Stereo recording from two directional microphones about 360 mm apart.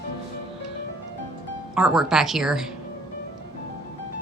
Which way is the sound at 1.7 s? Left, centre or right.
Centre.